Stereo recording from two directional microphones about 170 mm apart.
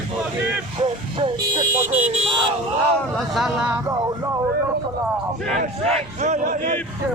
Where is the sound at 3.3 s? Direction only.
5° right (ahead or behind).